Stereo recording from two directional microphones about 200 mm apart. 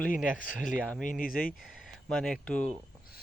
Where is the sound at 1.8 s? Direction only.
Centre (ahead or behind).